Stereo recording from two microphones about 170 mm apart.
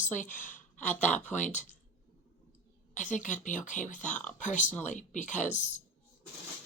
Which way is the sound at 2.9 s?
45° left (ahead or behind).